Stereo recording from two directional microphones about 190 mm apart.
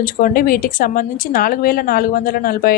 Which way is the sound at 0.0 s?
50° left (ahead or behind).